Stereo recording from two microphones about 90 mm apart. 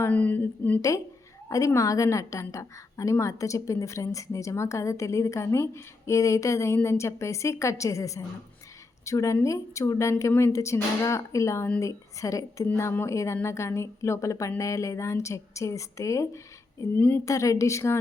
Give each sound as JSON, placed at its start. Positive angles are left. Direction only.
{"t": 0.1, "sound": "a woman's voice", "side_deg": 20}
{"t": 0.8, "sound": "a woman's voice", "side_deg": 35}
{"t": 16.9, "sound": "a woman's voice", "side_deg": 20}
{"t": 17.2, "sound": "a woman's voice", "side_deg": 35}